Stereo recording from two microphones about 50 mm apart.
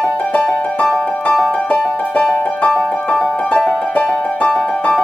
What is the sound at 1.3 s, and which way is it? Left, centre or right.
Music, centre.